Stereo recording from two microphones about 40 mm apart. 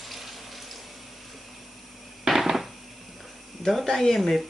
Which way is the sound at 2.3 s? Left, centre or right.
Centre.